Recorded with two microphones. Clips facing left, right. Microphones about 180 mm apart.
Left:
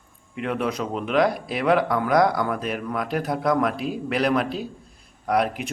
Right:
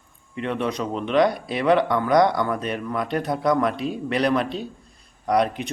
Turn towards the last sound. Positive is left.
turn(degrees=5)  # may be behind; listen again after turning